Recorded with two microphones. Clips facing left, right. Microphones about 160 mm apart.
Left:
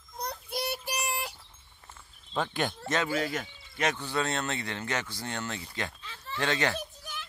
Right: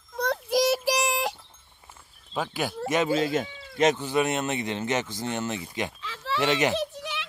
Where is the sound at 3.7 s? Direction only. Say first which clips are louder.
Right 7 dB; 20° right (ahead or behind).